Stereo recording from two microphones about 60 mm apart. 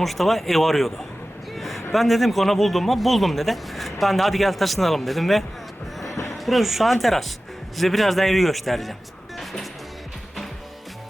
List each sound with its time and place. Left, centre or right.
0.0 s speech: centre
1.5 s a sound: centre
1.9 s speech: centre
6.1 s a sound: left
6.3 s speech: centre
9.4 s music: centre